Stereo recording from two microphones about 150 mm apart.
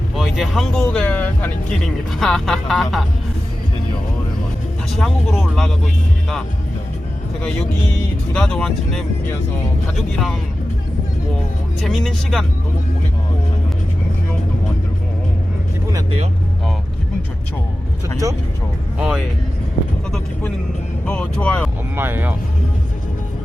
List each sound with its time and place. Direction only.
0.2 s music: centre (ahead or behind)
2.1 s speech: centre (ahead or behind)
4.9 s speech: centre (ahead or behind)
8.3 s speech: 5° left (ahead or behind)
11.8 s speech: centre (ahead or behind)
18.2 s speech: 20° right (ahead or behind)
18.9 s speech: 5° right (ahead or behind)
21.1 s speech: 10° left (ahead or behind)
21.9 s speech: 15° right (ahead or behind)